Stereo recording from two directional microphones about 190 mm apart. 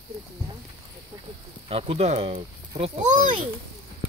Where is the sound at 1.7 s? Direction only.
30° right (ahead or behind).